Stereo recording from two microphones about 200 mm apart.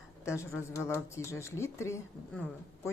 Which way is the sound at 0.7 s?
15° left (ahead or behind).